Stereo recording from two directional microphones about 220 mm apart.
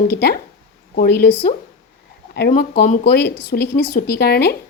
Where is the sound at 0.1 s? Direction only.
45° left (ahead or behind).